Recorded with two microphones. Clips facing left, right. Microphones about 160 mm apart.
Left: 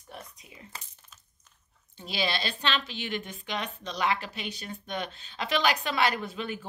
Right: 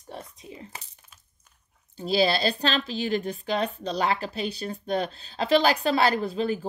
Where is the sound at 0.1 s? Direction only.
25° right (ahead or behind).